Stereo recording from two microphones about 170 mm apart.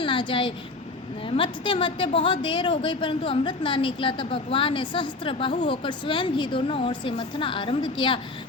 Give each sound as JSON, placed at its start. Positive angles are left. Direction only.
{"t": 0.0, "sound": "a woman's voice", "side_deg": 30}